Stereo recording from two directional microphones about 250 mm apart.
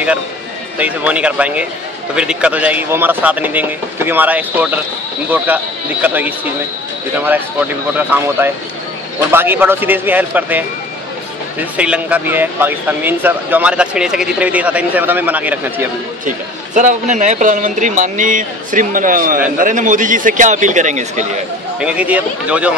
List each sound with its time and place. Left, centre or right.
0.7 s speech: centre
8.1 s speech: centre
9.3 s speech: centre
11.7 s speech: centre
16.3 s a man's voice: right
21.7 s speech: centre